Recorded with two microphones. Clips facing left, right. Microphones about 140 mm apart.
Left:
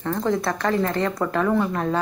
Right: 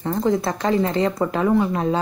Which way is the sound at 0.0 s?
15° right (ahead or behind).